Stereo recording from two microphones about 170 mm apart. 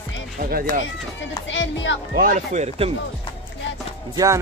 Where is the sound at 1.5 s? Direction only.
90° left.